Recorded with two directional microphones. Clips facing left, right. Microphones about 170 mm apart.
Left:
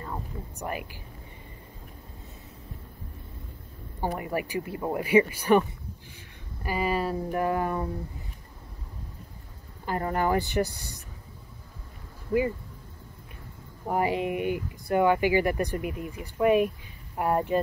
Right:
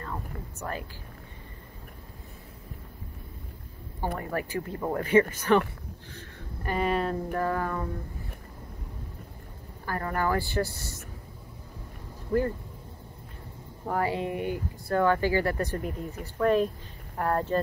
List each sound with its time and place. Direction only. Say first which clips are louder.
0.0 s a sound: left 1 dB; 15° left (ahead or behind)
4.2 s speech: left 1 dB; 15° left (ahead or behind)
6.1 s a sound: right 4 dB; 5° left (ahead or behind)
7.3 s speech: left 4 dB; 15° left (ahead or behind)
9.8 s speech: left 2 dB; 20° left (ahead or behind)
12.3 s speech: left 1 dB; 5° left (ahead or behind)
13.8 s speech: left 2 dB; 15° left (ahead or behind)